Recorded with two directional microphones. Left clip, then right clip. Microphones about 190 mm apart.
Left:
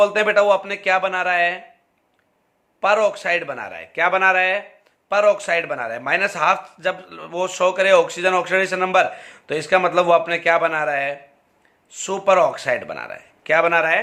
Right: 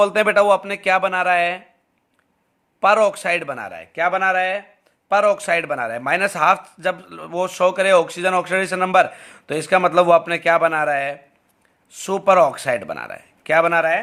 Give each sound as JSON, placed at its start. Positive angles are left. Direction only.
{"t": 0.0, "sound": "a man's voice", "side_deg": -35}
{"t": 2.8, "sound": "a man's voice", "side_deg": -40}
{"t": 5.0, "sound": "a man's voice", "side_deg": -35}